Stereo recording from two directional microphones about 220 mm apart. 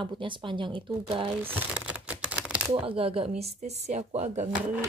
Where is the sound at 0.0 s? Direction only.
20° right (ahead or behind).